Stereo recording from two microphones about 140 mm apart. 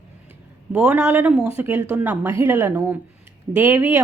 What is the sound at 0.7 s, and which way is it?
Speech, 10° right (ahead or behind).